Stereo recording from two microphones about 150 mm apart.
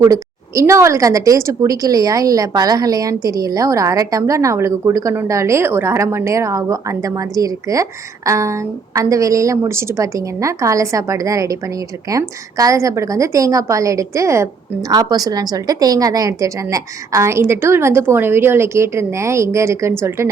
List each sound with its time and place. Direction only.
0.0 s a woman's voice: 20° right (ahead or behind)